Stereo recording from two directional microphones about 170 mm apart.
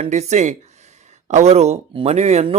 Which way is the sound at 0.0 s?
40° right (ahead or behind).